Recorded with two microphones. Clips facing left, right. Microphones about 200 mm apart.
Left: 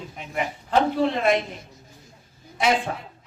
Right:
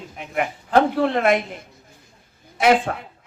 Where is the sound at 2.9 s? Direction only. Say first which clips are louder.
Right 3 dB; 60° right (ahead or behind).